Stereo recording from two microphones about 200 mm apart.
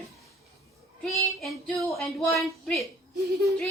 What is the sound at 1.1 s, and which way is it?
A woman's voice, centre (ahead or behind).